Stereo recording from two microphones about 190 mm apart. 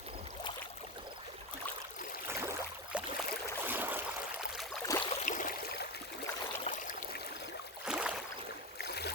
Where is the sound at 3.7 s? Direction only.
10° right (ahead or behind).